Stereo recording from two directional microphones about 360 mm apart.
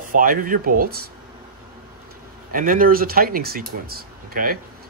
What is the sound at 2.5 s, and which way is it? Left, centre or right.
Speech, right.